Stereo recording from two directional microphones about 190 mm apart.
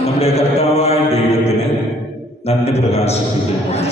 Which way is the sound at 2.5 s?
35° left (ahead or behind).